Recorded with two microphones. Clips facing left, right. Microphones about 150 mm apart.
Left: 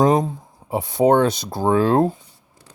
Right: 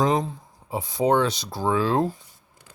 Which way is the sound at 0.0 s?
45° left (ahead or behind).